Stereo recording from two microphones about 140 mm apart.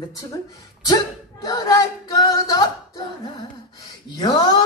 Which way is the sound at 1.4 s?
25° left (ahead or behind).